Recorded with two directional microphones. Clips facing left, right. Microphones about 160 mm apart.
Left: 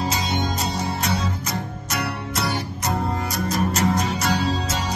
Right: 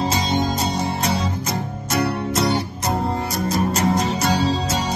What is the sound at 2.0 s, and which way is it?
Music, 30° right (ahead or behind).